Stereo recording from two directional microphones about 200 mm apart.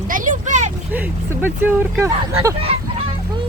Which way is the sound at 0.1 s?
40° right (ahead or behind).